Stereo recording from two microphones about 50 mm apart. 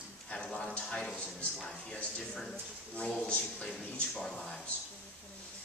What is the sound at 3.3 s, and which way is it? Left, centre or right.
Speech, left.